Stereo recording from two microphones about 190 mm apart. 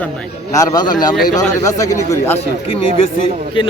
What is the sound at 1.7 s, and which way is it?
Speech, 15° left (ahead or behind).